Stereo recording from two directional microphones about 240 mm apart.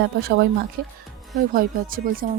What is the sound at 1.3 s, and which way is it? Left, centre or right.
Speech, right.